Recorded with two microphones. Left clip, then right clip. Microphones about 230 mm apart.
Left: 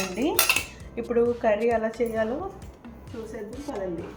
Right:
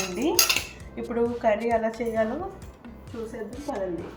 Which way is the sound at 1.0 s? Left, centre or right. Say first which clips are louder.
Left 3 dB; left.